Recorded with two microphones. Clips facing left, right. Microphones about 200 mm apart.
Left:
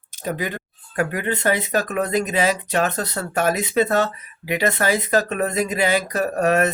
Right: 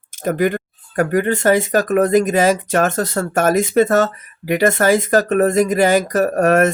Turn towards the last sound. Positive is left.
turn(degrees=-50)  # may be behind; listen again after turning